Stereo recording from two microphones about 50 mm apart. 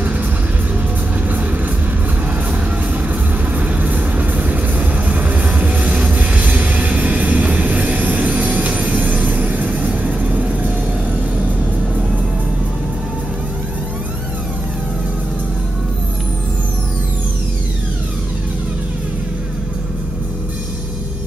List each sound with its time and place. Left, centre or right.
3.5 s music: right